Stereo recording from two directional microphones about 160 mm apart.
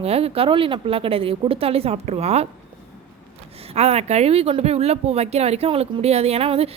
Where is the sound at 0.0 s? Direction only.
40° right (ahead or behind).